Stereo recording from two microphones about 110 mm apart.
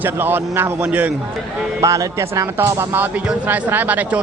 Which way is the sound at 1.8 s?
30° right (ahead or behind).